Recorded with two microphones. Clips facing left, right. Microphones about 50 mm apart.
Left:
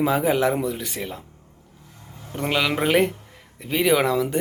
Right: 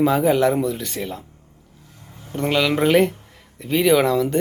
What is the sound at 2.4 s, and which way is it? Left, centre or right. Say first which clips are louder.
Speech: right 3 dB; centre.